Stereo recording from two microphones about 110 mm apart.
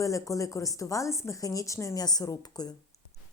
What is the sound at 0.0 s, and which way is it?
A woman's voice, 30° left (ahead or behind).